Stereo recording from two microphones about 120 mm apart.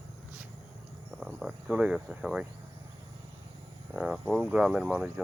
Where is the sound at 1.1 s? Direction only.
5° right (ahead or behind).